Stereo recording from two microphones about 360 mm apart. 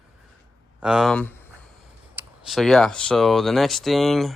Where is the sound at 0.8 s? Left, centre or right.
Centre.